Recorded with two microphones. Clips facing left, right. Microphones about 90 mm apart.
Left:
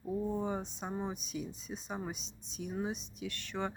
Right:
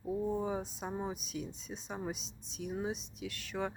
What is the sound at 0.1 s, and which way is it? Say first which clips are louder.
Speech: right 1 dB; 5° right (ahead or behind).